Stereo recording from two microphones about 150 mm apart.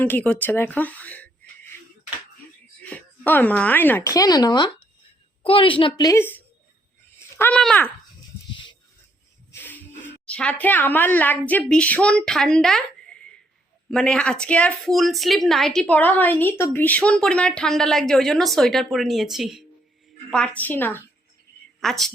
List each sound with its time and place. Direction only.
0.0 s a woman's voice: 10° left (ahead or behind)
2.8 s a woman's voice: 10° left (ahead or behind); by 6.1 s 35° left (ahead or behind)
6.1 s a woman's voice: 15° left (ahead or behind)
9.5 s music: 10° left (ahead or behind)
10.2 s a woman's voice: 10° left (ahead or behind)
21.8 s a woman's voice: centre (ahead or behind)